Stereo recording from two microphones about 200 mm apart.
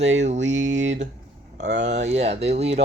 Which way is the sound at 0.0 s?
65° right (ahead or behind).